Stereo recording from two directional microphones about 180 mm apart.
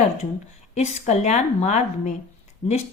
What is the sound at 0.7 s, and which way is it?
Speech, 40° left (ahead or behind).